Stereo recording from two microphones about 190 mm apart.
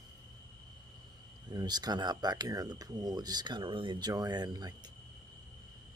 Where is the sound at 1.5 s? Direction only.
20° right (ahead or behind).